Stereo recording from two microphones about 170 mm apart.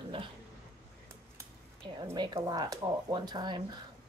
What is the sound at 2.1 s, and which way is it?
Speech, 20° right (ahead or behind).